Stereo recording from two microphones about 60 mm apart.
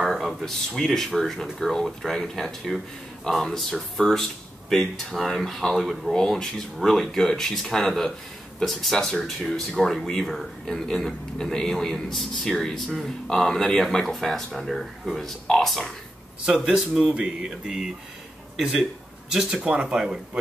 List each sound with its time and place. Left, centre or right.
0.0 s speech: centre